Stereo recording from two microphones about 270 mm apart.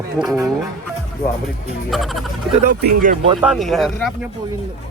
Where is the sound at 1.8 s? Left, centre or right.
Centre.